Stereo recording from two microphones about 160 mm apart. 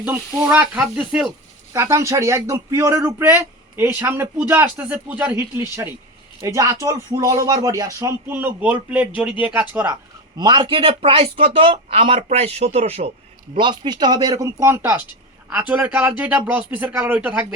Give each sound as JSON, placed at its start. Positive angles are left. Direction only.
{"t": 0.0, "sound": "speech", "side_deg": -10}
{"t": 1.7, "sound": "speech", "side_deg": -20}
{"t": 10.3, "sound": "speech", "side_deg": -30}
{"t": 13.6, "sound": "speech", "side_deg": -30}